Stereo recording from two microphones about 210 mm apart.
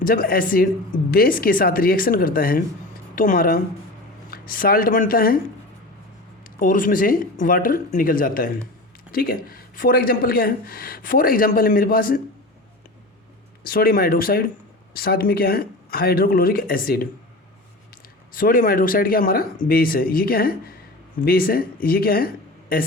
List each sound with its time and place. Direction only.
0.0 s speech: 45° left (ahead or behind)
6.4 s speech: 40° left (ahead or behind)
13.7 s speech: 45° left (ahead or behind)
18.3 s speech: 40° left (ahead or behind)